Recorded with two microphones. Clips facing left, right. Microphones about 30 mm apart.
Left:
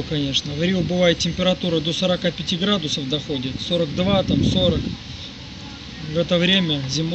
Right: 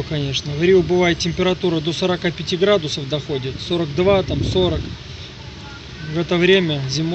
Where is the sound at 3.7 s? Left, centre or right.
Centre.